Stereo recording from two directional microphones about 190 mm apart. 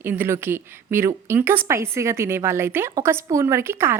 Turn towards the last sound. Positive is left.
turn(degrees=-10)  # may be behind; listen again after turning